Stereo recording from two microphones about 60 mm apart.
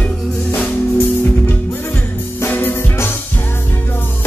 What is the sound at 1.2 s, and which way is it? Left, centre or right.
Music, left.